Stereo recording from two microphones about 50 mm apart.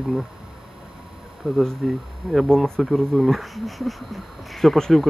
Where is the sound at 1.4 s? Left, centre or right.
Centre.